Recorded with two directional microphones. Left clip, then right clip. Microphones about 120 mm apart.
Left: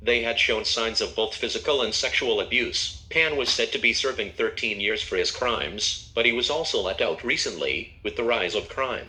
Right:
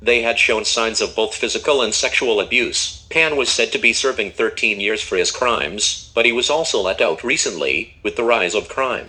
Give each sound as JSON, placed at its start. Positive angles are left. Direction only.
{"t": 0.0, "sound": "speech", "side_deg": -35}